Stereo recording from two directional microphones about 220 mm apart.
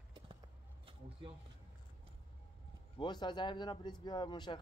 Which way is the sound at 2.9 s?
20° left (ahead or behind).